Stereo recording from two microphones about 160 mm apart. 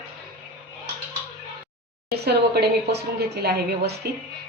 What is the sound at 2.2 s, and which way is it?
Speech, 90° right.